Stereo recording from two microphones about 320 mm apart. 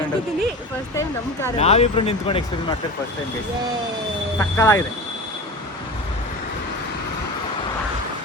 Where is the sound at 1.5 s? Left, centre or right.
Centre.